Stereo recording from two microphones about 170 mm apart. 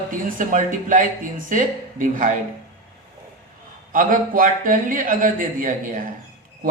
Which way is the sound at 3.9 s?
55° right (ahead or behind).